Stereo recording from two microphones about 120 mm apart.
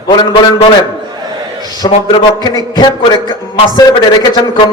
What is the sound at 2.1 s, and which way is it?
Mantra, 40° left (ahead or behind).